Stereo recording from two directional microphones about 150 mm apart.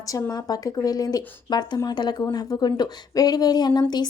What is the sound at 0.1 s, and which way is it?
Speech, 25° left (ahead or behind).